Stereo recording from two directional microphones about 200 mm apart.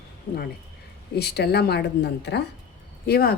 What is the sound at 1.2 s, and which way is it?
A woman's voice, 55° left (ahead or behind).